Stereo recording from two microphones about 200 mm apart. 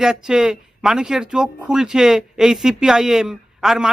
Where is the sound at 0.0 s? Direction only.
5° right (ahead or behind).